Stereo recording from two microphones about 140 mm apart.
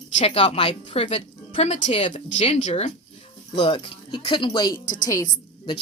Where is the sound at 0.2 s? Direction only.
40° left (ahead or behind).